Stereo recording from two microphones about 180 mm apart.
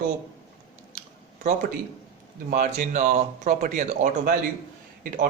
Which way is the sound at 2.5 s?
45° right (ahead or behind).